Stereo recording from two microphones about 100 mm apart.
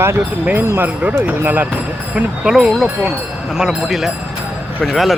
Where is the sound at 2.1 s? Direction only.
5° right (ahead or behind).